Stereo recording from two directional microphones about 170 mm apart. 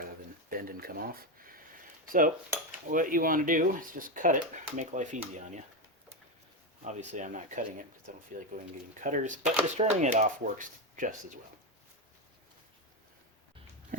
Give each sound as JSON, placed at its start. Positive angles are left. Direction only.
{"t": 0.5, "sound": "speech", "side_deg": -60}
{"t": 2.0, "sound": "cutlery", "side_deg": -55}
{"t": 2.7, "sound": "speech", "side_deg": -50}
{"t": 6.8, "sound": "speech", "side_deg": -45}